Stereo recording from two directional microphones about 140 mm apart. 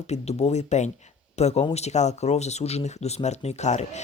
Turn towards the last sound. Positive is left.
turn(degrees=55)  # may be behind; listen again after turning